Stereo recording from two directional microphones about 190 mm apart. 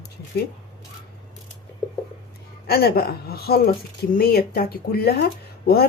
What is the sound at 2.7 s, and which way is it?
Speech, 55° left (ahead or behind).